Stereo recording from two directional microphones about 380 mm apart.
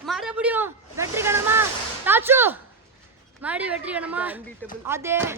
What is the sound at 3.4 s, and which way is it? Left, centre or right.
Speech, centre.